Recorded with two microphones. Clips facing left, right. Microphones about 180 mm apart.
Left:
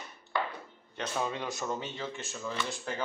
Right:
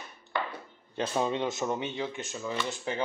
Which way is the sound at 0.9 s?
30° right (ahead or behind).